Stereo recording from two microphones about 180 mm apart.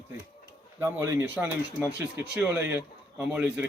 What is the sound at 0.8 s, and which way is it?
Speech, 15° right (ahead or behind).